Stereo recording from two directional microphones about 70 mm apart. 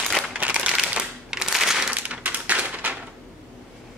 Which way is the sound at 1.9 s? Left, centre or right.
Right.